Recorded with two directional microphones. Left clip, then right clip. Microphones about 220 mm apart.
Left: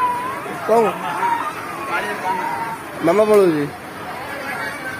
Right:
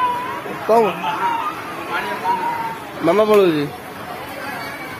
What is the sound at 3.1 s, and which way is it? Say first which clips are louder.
Speech: even; 15° right (ahead or behind).